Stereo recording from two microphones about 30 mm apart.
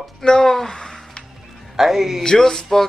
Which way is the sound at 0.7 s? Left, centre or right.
Left.